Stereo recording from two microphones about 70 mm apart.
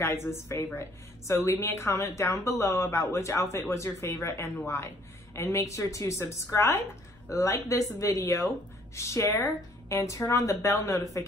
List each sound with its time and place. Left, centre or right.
0.0 s a woman's voice: left